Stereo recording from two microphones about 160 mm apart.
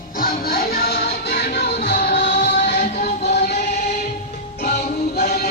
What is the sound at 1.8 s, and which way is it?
Music, 45° left (ahead or behind).